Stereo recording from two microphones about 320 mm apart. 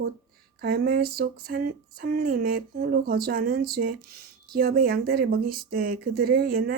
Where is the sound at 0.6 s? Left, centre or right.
Right.